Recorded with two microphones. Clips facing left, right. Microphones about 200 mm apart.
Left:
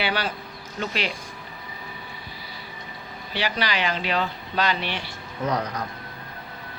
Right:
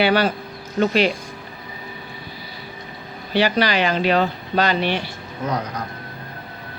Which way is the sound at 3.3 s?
45° right (ahead or behind).